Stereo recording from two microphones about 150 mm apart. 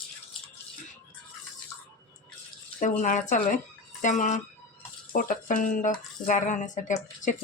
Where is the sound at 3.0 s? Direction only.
55° left (ahead or behind).